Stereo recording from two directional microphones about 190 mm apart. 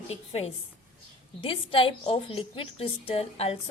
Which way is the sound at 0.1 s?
35° left (ahead or behind).